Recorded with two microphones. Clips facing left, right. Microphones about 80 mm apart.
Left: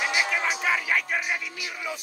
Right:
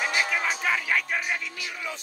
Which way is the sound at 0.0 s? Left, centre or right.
Centre.